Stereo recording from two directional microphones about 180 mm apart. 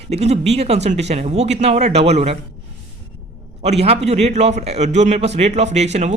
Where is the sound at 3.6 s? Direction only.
35° right (ahead or behind).